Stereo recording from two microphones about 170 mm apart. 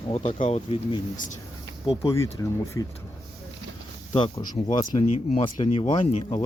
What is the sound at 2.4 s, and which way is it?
Speech, 15° left (ahead or behind).